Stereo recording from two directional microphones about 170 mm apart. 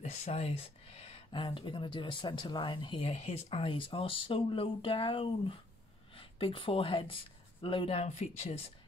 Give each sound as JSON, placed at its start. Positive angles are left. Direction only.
{"t": 0.0, "sound": "speech", "side_deg": 40}